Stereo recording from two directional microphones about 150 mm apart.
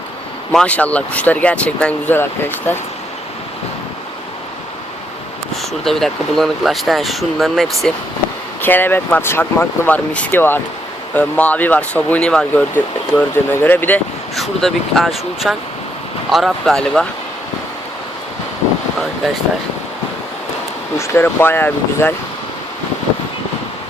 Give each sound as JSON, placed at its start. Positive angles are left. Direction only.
{"t": 0.5, "sound": "speech", "side_deg": 10}
{"t": 5.8, "sound": "speech", "side_deg": 0}
{"t": 8.6, "sound": "speech", "side_deg": 15}
{"t": 14.3, "sound": "speech", "side_deg": 0}
{"t": 21.0, "sound": "speech", "side_deg": 15}